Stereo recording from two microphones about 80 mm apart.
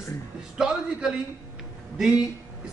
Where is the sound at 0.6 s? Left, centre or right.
Centre.